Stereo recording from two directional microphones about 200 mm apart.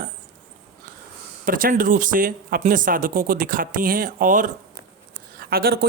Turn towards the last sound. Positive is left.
turn(degrees=-50)  # may be behind; listen again after turning